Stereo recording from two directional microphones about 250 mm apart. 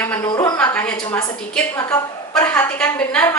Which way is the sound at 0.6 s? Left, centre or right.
Centre.